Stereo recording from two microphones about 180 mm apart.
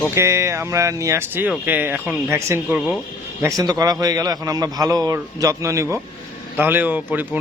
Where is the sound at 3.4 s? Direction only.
20° right (ahead or behind).